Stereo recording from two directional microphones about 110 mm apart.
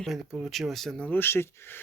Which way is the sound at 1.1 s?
20° left (ahead or behind).